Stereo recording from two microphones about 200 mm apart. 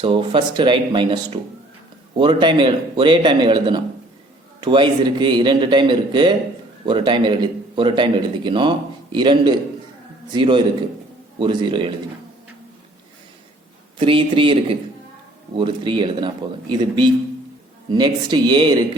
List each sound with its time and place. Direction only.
0.0 s a man's voice: 25° right (ahead or behind)
14.0 s a man's voice: 25° right (ahead or behind)